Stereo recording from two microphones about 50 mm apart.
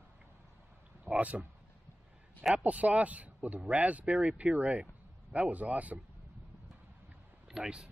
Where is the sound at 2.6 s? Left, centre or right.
Right.